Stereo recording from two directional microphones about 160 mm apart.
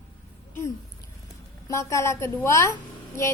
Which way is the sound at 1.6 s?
20° left (ahead or behind).